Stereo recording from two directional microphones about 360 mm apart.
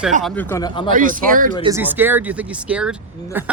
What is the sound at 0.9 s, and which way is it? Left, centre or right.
Speech, right.